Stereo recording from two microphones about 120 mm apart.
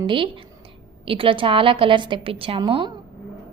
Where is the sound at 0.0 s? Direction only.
45° right (ahead or behind).